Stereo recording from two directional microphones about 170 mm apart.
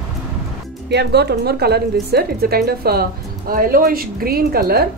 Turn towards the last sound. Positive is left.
turn(degrees=-65)  # may be behind; listen again after turning